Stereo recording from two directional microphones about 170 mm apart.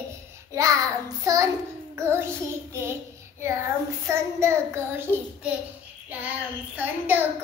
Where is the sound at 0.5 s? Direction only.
20° right (ahead or behind).